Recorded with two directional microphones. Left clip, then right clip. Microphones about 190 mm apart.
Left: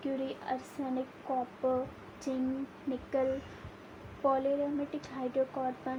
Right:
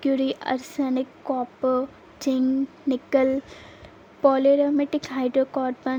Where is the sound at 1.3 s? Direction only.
55° right (ahead or behind).